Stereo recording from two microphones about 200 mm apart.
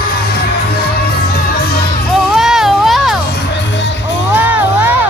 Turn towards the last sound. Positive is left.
turn(degrees=0)  # may be behind; listen again after turning